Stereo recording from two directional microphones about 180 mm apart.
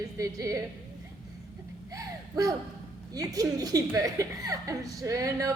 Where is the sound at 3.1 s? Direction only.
20° right (ahead or behind).